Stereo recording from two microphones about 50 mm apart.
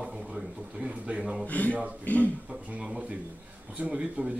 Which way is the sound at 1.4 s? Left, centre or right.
Left.